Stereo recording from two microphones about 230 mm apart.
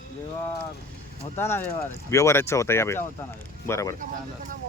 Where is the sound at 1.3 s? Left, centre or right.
Centre.